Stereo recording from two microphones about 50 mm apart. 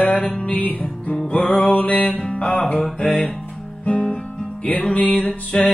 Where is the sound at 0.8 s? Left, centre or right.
Left.